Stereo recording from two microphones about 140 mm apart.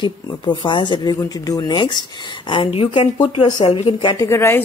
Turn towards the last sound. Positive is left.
turn(degrees=20)  # may be behind; listen again after turning